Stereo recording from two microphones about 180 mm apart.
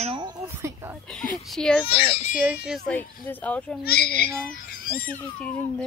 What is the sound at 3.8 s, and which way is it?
Speech, 60° left (ahead or behind).